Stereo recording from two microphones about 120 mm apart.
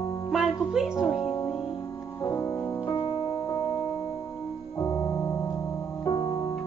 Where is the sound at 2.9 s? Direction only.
45° left (ahead or behind).